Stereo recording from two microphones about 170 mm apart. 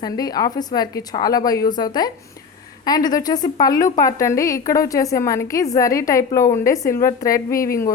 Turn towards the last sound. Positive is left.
turn(degrees=60)  # may be behind; listen again after turning